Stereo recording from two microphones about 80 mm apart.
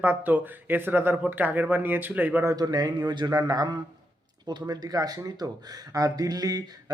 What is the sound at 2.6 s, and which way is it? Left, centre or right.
Speech, right.